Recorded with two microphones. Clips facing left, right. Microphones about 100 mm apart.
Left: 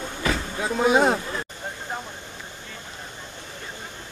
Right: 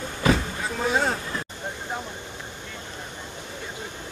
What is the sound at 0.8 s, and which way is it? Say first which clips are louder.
Speech: left 5 dB; 20° left (ahead or behind).